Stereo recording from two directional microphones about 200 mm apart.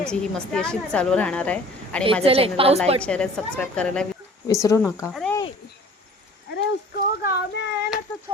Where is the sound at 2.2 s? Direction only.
30° right (ahead or behind).